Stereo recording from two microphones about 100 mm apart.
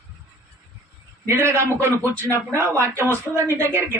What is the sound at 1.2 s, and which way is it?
Speech, 25° right (ahead or behind).